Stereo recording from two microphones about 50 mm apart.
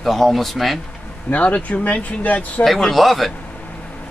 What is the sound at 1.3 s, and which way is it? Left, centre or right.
Speech, left.